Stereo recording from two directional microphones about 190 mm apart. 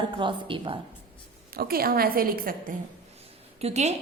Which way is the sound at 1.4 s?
50° right (ahead or behind).